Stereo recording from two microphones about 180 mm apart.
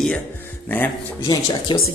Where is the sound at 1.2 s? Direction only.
20° left (ahead or behind).